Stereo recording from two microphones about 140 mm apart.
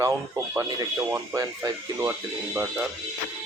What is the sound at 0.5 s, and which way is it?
Speech, 15° right (ahead or behind).